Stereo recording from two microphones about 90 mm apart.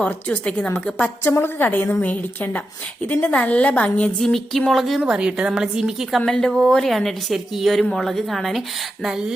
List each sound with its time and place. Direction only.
0.0 s a woman's voice: 15° left (ahead or behind)
1.2 s a woman's voice: 25° left (ahead or behind)
4.2 s a woman's voice: centre (ahead or behind)